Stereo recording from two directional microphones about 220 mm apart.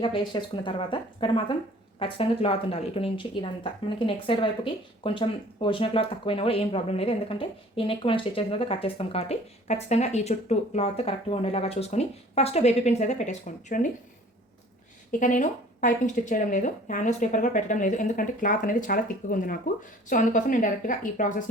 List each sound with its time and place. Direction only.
0.0 s a woman's voice: 20° left (ahead or behind)
15.2 s speech: 35° left (ahead or behind)